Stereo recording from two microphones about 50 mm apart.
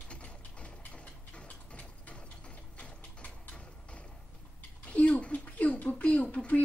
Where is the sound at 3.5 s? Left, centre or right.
Left.